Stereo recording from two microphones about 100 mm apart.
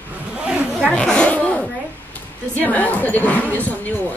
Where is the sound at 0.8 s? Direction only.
10° left (ahead or behind).